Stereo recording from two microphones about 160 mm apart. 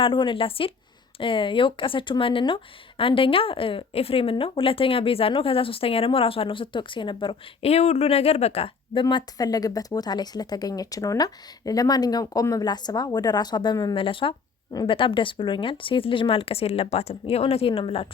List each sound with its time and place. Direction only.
0.0 s a woman's voice: 30° left (ahead or behind)